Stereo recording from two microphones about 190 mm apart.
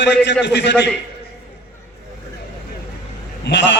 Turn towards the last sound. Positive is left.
turn(degrees=65)  # may be behind; listen again after turning